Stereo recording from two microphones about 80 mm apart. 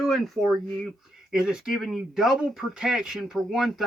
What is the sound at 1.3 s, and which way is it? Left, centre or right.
Speech, centre.